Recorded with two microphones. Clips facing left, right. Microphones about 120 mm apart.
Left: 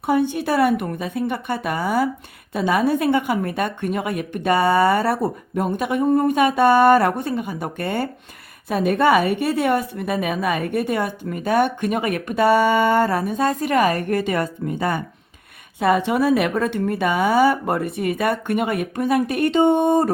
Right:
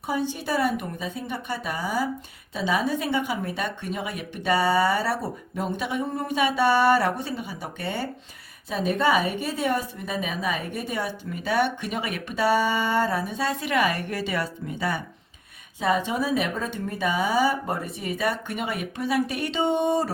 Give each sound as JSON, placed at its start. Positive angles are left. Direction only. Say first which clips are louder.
{"t": 0.0, "sound": "a woman's voice", "louder": "left 8 dB", "side_deg": 60}
{"t": 15.8, "sound": "a woman's voice", "louder": "left 6 dB", "side_deg": 60}